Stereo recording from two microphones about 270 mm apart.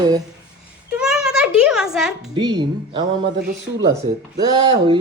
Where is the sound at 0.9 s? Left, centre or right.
Centre.